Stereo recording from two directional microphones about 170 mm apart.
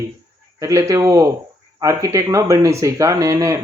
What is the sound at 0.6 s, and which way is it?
Speech, 20° right (ahead or behind).